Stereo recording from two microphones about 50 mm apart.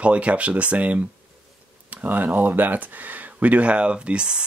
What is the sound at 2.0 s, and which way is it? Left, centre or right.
Speech, right.